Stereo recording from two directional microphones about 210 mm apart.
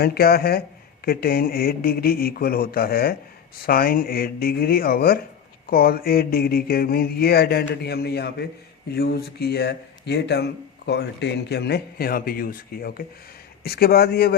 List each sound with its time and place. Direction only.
0.0 s speech: 45° left (ahead or behind)